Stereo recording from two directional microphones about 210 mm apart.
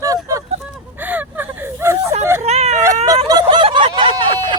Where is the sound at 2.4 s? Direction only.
30° right (ahead or behind).